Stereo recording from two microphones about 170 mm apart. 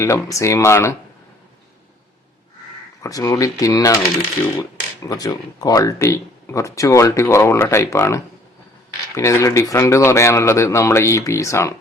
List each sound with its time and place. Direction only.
0.0 s speech: 15° left (ahead or behind)
3.0 s speech: 20° left (ahead or behind)
5.0 s speech: 20° left (ahead or behind)